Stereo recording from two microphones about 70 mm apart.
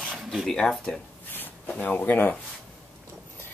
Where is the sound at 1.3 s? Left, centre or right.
Left.